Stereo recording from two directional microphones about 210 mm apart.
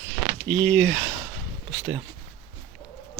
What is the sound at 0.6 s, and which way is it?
Speech, centre (ahead or behind).